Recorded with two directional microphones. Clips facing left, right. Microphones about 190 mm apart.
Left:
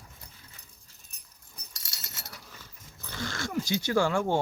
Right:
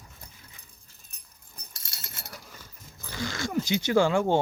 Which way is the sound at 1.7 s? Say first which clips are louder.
Right 1 dB; 55° right (ahead or behind).